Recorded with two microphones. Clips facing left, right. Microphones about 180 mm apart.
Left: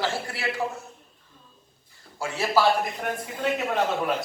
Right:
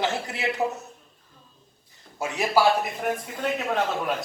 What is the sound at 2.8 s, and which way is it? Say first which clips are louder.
A man's voice: right 2 dB; centre (ahead or behind).